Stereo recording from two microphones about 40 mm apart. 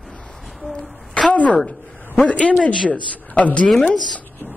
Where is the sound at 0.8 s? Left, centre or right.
Centre.